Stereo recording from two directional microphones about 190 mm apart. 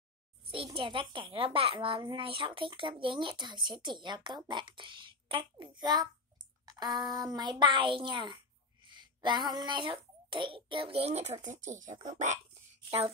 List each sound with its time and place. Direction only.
0.5 s a child's voice: 30° right (ahead or behind)